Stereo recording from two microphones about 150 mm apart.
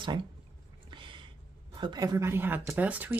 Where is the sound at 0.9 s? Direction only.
35° right (ahead or behind).